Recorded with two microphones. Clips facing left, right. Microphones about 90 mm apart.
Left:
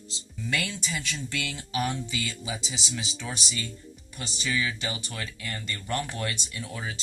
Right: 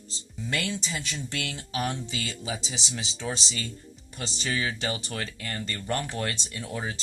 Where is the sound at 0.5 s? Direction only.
25° right (ahead or behind).